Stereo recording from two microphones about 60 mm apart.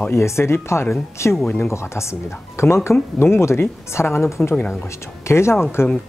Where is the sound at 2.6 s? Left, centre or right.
Left.